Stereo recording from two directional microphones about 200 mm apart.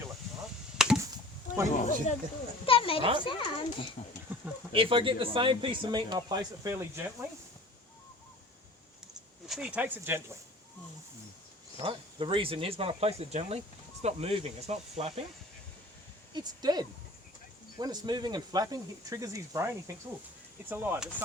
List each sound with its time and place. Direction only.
0.8 s chop: 5° right (ahead or behind)
1.7 s speech: 35° left (ahead or behind)
2.6 s a child's voice: 25° left (ahead or behind)
3.0 s speech: 25° right (ahead or behind)
3.2 s a child's voice: 25° left (ahead or behind)
4.3 s a sound: 10° right (ahead or behind)
4.7 s speech: 25° right (ahead or behind)
9.5 s speech: 5° right (ahead or behind)
11.8 s speech: 25° right (ahead or behind)
16.3 s speech: 20° right (ahead or behind)